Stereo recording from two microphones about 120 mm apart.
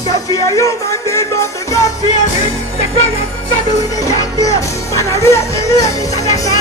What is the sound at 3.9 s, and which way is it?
Music, 30° left (ahead or behind).